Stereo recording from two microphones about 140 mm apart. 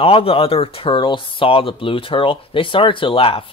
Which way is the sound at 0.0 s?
45° left (ahead or behind).